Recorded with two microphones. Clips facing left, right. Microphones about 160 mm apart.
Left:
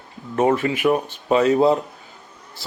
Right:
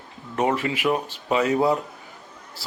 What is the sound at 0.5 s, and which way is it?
Speech, 45° left (ahead or behind).